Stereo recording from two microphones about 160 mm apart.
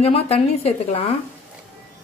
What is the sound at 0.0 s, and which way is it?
A woman's voice, 40° left (ahead or behind).